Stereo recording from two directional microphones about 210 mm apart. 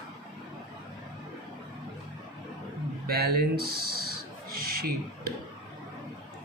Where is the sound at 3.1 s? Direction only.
45° right (ahead or behind).